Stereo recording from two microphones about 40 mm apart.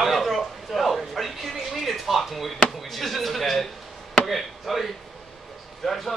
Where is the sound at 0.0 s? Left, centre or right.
Centre.